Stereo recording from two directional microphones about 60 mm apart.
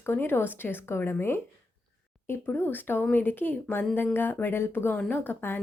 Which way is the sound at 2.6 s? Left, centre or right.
Left.